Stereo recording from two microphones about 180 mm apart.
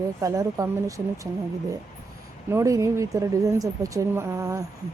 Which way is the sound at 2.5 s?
15° right (ahead or behind).